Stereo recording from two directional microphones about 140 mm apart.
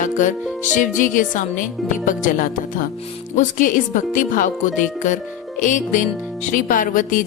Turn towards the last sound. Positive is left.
turn(degrees=70)  # may be behind; listen again after turning